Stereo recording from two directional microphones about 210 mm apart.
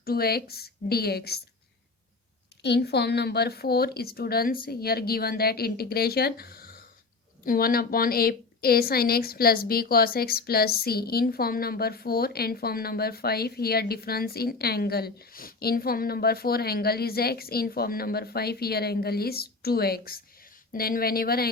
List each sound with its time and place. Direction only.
0.0 s a woman's voice: 45° left (ahead or behind)
2.6 s a woman's voice: 50° left (ahead or behind)